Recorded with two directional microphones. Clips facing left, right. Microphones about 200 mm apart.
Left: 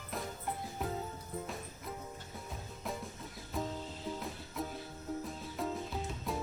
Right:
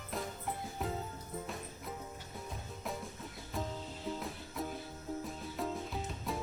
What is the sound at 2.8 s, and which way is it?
Music, centre (ahead or behind).